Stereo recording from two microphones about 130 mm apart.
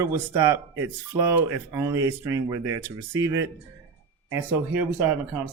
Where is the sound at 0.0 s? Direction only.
20° right (ahead or behind).